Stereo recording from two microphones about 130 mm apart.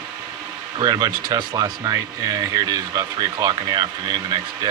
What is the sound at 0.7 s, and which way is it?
Speech, 30° right (ahead or behind).